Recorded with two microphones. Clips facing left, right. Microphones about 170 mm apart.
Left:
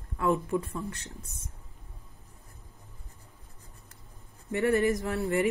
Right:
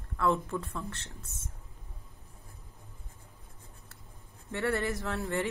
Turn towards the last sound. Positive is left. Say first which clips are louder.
# left 5 dB
turn(degrees=15)  # may be behind; listen again after turning